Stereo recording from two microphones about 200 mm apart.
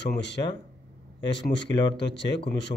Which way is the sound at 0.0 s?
60° left (ahead or behind).